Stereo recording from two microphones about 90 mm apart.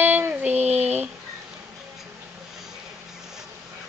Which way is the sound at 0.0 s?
20° right (ahead or behind).